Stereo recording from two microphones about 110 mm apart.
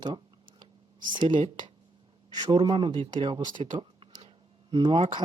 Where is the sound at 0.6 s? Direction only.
45° right (ahead or behind).